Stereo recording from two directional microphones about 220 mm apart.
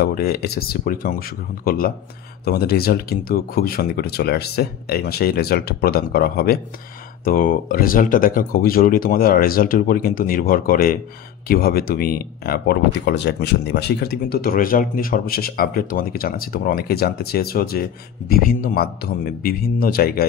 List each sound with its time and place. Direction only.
0.0 s speech: 45° left (ahead or behind)